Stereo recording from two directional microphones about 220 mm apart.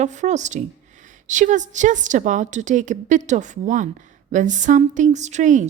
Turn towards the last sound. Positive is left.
turn(degrees=-35)  # may be behind; listen again after turning